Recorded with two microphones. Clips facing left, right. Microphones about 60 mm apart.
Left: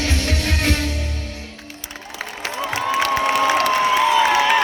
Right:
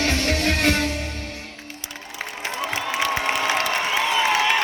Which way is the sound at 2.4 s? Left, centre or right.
Left.